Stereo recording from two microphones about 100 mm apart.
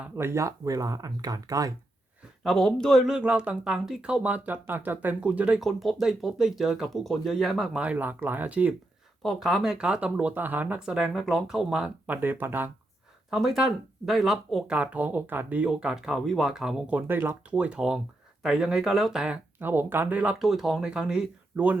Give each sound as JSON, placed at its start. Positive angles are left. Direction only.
{"t": 0.2, "sound": "speech", "side_deg": -25}
{"t": 2.4, "sound": "speech", "side_deg": 5}
{"t": 3.1, "sound": "speech", "side_deg": -10}
{"t": 5.6, "sound": "speech", "side_deg": 0}
{"t": 7.9, "sound": "speech", "side_deg": -20}
{"t": 9.2, "sound": "speech", "side_deg": 0}
{"t": 12.0, "sound": "speech", "side_deg": -20}
{"t": 13.3, "sound": "speech", "side_deg": -5}
{"t": 14.8, "sound": "speech", "side_deg": -15}
{"t": 17.5, "sound": "speech", "side_deg": -10}
{"t": 19.5, "sound": "speech", "side_deg": -20}
{"t": 20.4, "sound": "speech", "side_deg": -5}